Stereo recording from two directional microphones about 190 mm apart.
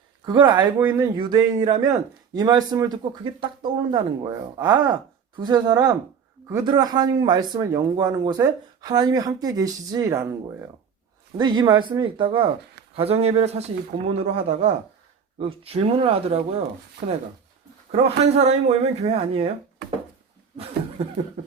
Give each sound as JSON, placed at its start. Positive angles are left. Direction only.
{"t": 0.3, "sound": "speech", "side_deg": -25}
{"t": 0.8, "sound": "speech", "side_deg": -10}
{"t": 1.1, "sound": "speech", "side_deg": -25}
{"t": 11.3, "sound": "speech", "side_deg": -20}
{"t": 17.9, "sound": "speech", "side_deg": -35}
{"t": 21.0, "sound": "speech", "side_deg": -35}